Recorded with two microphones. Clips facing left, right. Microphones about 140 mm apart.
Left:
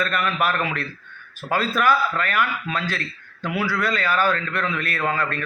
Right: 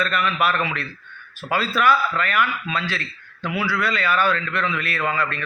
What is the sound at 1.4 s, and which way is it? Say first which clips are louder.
A man's voice: even; 45° left (ahead or behind).